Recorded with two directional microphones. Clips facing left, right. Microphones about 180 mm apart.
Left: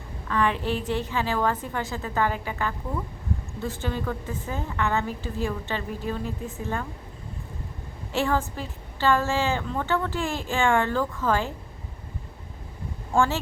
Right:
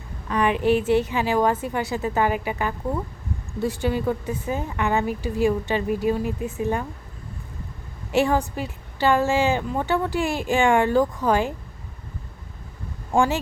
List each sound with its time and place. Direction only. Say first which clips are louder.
0.3 s a woman's voice: right 5 dB; 15° right (ahead or behind)
8.1 s a woman's voice: right 5 dB; 15° right (ahead or behind)
13.1 s a woman's voice: right 3 dB; 15° right (ahead or behind)